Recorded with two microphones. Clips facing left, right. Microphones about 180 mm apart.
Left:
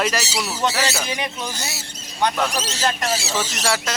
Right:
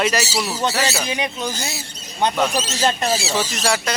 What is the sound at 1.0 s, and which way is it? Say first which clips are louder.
Speech: right 3 dB; 20° right (ahead or behind).